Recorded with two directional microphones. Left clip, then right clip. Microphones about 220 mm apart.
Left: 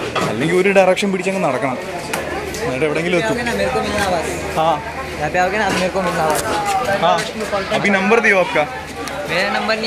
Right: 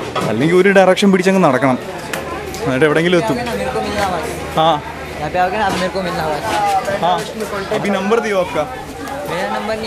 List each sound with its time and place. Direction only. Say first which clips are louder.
0.4 s a man's voice: right 3 dB; 25° right (ahead or behind)
2.7 s speech: right 6 dB; 35° right (ahead or behind)
4.6 s speech: right 3 dB; 35° right (ahead or behind)
5.3 s a man's voice: right 1 dB; 5° right (ahead or behind)
7.8 s a man's voice: left 3 dB; 5° right (ahead or behind)